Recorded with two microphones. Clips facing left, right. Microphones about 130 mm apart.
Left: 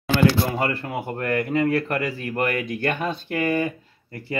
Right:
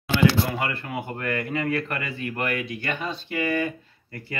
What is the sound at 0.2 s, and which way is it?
Speech, 35° left (ahead or behind).